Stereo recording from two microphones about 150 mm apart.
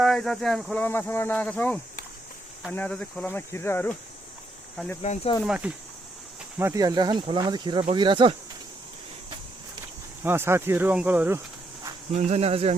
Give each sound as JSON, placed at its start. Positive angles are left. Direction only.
{"t": 0.0, "sound": "speech", "side_deg": 0}
{"t": 5.0, "sound": "speech", "side_deg": 50}
{"t": 5.5, "sound": "speech", "side_deg": -10}
{"t": 6.6, "sound": "speech", "side_deg": -20}
{"t": 10.2, "sound": "speech", "side_deg": -15}
{"t": 12.1, "sound": "speech", "side_deg": -45}